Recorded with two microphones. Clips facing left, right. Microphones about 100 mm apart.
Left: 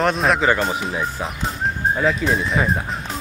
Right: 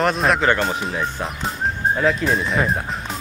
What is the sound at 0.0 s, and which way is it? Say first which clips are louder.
Speech: even; centre (ahead or behind).